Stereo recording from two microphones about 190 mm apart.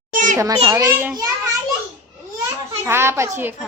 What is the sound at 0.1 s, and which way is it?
Children playing, 45° right (ahead or behind).